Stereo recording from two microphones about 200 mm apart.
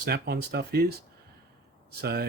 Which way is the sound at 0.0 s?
55° right (ahead or behind).